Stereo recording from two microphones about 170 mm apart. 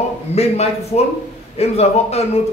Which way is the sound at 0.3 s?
40° left (ahead or behind).